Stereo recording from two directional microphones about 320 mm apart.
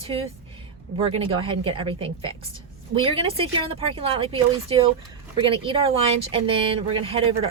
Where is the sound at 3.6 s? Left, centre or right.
Centre.